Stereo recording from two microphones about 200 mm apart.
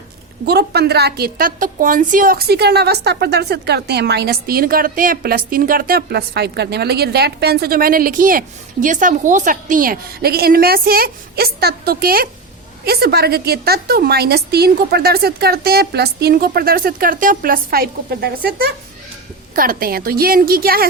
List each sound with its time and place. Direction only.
0.4 s a woman's voice: 55° right (ahead or behind)